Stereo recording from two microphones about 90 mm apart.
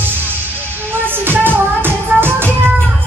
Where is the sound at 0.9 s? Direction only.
25° right (ahead or behind).